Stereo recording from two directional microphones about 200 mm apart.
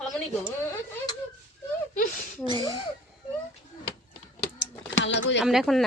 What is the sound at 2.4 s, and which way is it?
Speech, 20° right (ahead or behind).